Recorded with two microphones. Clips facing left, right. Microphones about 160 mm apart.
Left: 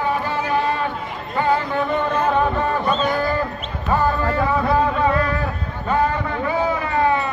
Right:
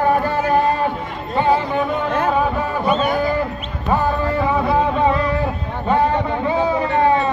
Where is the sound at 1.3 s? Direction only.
15° right (ahead or behind).